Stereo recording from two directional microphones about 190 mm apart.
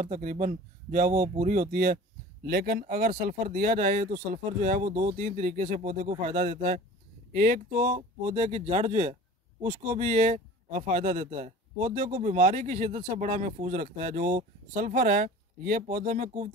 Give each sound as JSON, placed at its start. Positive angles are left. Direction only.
{"t": 0.0, "sound": "speech", "side_deg": -40}